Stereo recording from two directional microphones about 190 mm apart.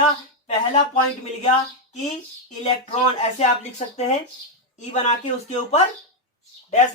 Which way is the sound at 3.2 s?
35° left (ahead or behind).